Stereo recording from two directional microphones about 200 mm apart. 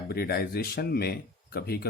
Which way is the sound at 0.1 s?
50° left (ahead or behind).